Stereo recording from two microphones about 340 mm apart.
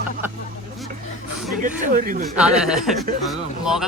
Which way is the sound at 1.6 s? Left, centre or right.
Right.